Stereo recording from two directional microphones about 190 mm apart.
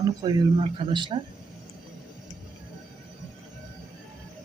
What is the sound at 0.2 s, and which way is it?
Speech, 25° right (ahead or behind).